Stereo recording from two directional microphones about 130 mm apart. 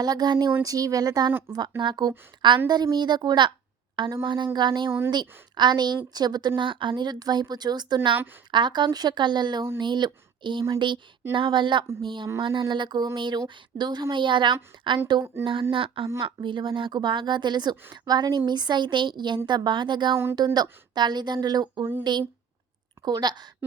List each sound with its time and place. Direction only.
0.0 s a woman's voice: 30° right (ahead or behind)
4.9 s speech: 20° right (ahead or behind)
5.1 s a woman's voice: 35° right (ahead or behind)